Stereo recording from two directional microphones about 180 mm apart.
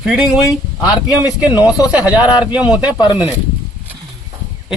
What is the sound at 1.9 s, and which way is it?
Speech, 10° right (ahead or behind).